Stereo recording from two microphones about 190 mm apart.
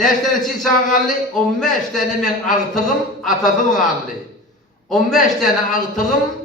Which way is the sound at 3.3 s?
45° left (ahead or behind).